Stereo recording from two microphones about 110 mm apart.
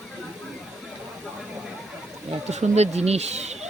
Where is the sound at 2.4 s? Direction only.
85° right.